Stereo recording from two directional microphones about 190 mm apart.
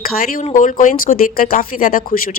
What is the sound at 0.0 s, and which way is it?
A woman's voice, 50° left (ahead or behind).